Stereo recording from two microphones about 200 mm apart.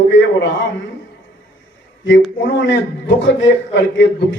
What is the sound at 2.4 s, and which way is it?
A man's voice, 65° left (ahead or behind).